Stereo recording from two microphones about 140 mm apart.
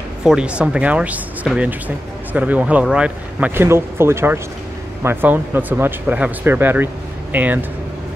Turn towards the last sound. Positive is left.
turn(degrees=-10)  # may be behind; listen again after turning